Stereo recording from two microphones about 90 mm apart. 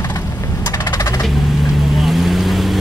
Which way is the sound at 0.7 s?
40° left (ahead or behind).